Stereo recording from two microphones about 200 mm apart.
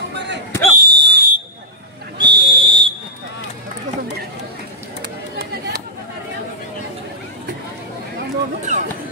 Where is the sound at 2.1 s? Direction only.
25° right (ahead or behind).